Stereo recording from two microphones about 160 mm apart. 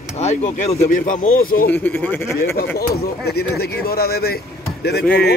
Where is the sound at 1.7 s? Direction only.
10° left (ahead or behind).